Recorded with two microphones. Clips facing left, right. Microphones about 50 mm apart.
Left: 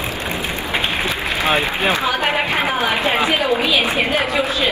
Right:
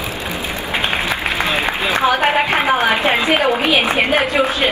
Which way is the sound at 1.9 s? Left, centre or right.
Right.